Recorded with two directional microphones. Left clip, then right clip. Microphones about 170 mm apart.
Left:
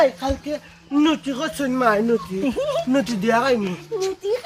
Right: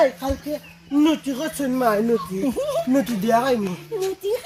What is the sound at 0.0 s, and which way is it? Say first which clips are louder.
Speech: left 1 dB; centre (ahead or behind).